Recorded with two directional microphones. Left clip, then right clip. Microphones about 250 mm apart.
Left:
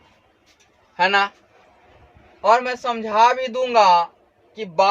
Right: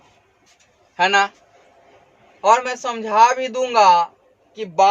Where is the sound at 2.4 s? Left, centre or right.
Centre.